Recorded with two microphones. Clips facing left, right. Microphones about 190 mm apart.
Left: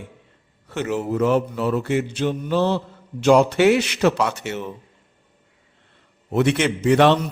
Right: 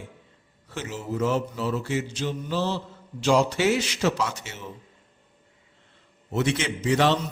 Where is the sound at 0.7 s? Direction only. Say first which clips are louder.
Left 8 dB; 60° left (ahead or behind).